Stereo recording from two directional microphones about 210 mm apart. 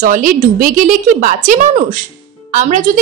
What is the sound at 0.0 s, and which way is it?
A woman's voice, 40° right (ahead or behind).